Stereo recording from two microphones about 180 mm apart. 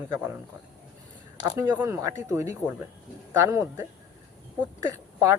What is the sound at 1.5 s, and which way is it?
Speech, 15° right (ahead or behind).